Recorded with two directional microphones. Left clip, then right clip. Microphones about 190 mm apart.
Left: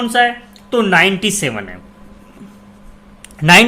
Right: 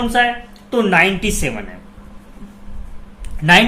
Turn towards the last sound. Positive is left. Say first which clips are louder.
# left 2 dB
turn(degrees=50)  # may be behind; listen again after turning